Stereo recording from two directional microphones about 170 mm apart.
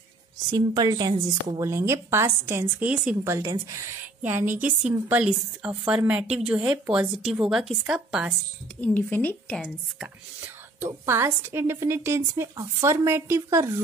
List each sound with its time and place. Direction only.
0.5 s a woman's voice: 25° right (ahead or behind); by 8.4 s 5° right (ahead or behind)
8.8 s speech: 10° left (ahead or behind)
10.4 s a woman's voice: 15° right (ahead or behind)